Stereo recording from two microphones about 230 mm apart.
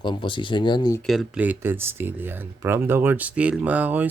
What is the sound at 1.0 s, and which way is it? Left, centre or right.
Speech, centre.